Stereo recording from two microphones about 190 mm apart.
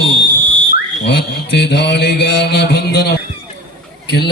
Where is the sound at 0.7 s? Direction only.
60° left (ahead or behind).